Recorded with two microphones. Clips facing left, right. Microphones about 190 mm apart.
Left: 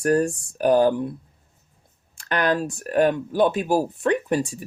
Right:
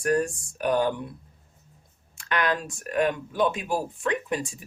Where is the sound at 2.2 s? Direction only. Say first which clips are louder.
Left 4 dB; 35° left (ahead or behind).